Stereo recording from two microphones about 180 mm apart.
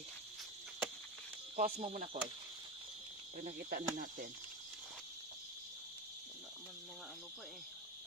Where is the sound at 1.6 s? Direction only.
50° right (ahead or behind).